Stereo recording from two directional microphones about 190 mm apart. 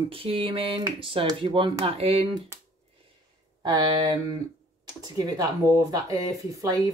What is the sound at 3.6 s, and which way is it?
Speech, 20° right (ahead or behind).